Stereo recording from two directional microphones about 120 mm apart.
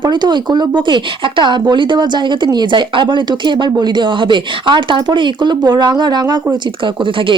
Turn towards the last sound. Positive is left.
turn(degrees=-45)  # may be behind; listen again after turning